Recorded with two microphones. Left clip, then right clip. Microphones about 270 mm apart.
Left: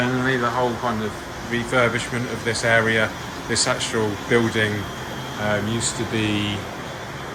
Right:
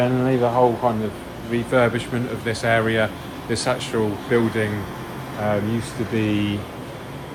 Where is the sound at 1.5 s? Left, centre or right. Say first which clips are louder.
Right 1 dB; centre.